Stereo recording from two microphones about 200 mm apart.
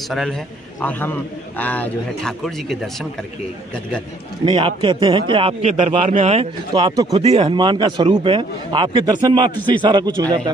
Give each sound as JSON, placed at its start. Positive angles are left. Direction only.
{"t": 0.1, "sound": "a man's voice", "side_deg": 0}
{"t": 4.5, "sound": "a man's voice", "side_deg": -25}